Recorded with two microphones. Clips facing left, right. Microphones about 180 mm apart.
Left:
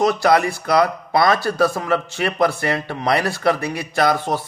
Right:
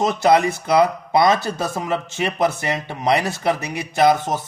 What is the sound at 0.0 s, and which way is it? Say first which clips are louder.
Speech: even; 20° right (ahead or behind).